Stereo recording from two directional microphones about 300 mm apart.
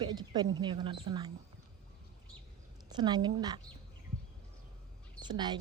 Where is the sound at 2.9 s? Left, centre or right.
Centre.